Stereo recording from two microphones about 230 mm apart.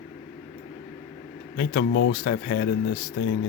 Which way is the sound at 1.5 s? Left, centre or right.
Left.